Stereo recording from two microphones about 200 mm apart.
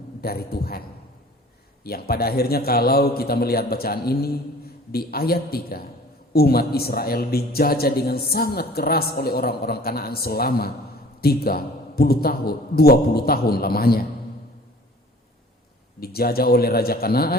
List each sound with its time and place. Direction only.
0.2 s a man's voice: 50° left (ahead or behind)
16.0 s a man's voice: 50° left (ahead or behind)